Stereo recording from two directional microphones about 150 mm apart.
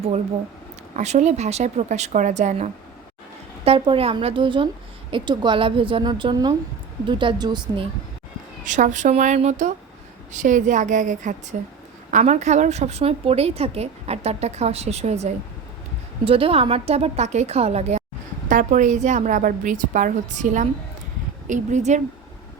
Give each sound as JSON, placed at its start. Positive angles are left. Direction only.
{"t": 0.9, "sound": "a woman's voice", "side_deg": -50}
{"t": 3.6, "sound": "a woman's voice", "side_deg": -40}
{"t": 8.6, "sound": "a woman's voice", "side_deg": -55}
{"t": 18.4, "sound": "a woman's voice", "side_deg": -55}